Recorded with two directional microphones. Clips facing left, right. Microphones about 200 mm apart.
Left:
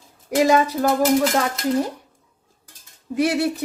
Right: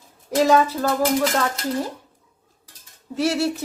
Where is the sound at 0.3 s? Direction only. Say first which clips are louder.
Even; 15° left (ahead or behind).